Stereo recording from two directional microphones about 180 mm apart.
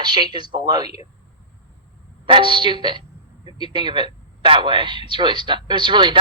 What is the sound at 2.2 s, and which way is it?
Speech, 25° right (ahead or behind).